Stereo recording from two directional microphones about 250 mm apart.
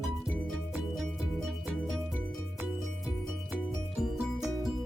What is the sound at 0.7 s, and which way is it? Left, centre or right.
Music, centre.